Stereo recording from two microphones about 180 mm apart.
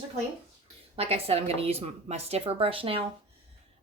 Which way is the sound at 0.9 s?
35° right (ahead or behind).